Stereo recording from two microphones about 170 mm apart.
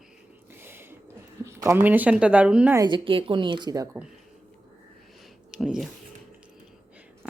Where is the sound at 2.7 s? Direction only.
25° right (ahead or behind).